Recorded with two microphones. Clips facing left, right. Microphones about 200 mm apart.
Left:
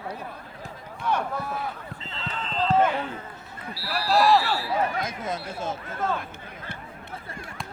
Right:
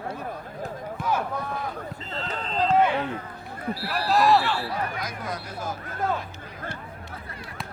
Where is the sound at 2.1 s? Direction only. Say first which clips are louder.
Right 2 dB; 40° right (ahead or behind).